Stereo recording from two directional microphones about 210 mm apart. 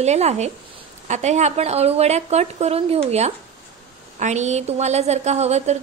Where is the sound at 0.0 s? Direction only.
30° right (ahead or behind).